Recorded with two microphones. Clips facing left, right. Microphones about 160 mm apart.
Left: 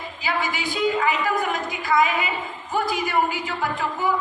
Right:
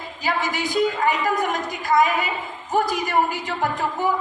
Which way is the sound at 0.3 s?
40° right (ahead or behind).